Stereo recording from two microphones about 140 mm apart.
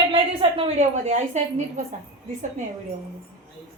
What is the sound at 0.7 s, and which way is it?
Speech, 55° right (ahead or behind).